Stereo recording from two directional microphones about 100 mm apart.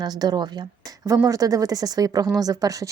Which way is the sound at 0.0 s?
45° right (ahead or behind).